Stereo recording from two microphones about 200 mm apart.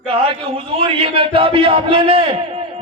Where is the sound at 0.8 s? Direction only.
25° right (ahead or behind).